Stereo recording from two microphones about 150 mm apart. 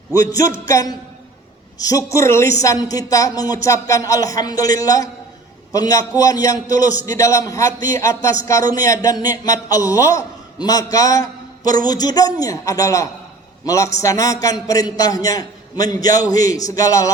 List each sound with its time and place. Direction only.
0.1 s a man's voice: 25° left (ahead or behind)